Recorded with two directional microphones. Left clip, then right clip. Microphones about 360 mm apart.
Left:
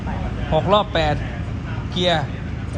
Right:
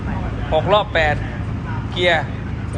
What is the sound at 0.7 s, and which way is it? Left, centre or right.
Speech, centre.